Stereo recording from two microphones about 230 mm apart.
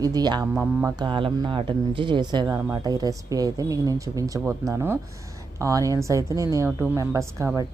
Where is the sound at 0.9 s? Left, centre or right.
Right.